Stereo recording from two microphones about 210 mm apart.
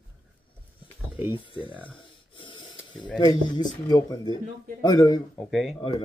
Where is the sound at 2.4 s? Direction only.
25° left (ahead or behind).